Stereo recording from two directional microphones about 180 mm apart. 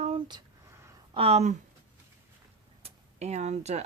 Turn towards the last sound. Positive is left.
turn(degrees=-40)  # may be behind; listen again after turning